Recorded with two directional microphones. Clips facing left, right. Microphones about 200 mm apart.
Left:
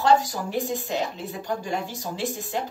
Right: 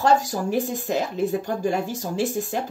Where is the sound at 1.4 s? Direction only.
45° right (ahead or behind).